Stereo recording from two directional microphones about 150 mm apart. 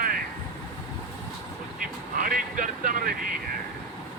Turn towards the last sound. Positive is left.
turn(degrees=-70)  # may be behind; listen again after turning